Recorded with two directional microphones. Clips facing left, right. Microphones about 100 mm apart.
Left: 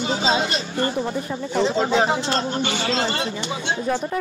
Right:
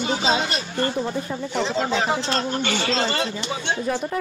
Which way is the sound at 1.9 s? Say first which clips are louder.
Left 3 dB; 25° left (ahead or behind).